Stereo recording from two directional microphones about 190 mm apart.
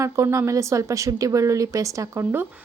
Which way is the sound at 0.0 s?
15° right (ahead or behind).